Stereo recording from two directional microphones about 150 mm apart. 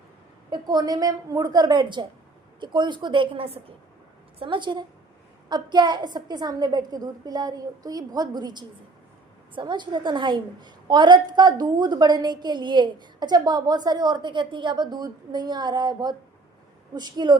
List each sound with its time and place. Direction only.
0.5 s a woman's voice: 25° right (ahead or behind)